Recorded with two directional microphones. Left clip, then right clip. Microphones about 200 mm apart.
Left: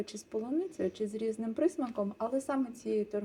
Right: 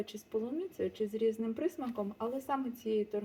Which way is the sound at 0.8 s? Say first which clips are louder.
Right 1 dB; 20° left (ahead or behind).